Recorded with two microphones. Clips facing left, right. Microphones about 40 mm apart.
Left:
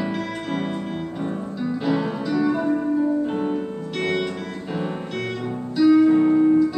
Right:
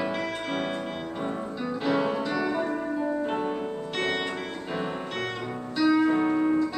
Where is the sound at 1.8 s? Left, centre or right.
Centre.